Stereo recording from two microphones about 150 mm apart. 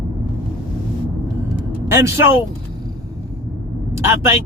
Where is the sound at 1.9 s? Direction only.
20° right (ahead or behind).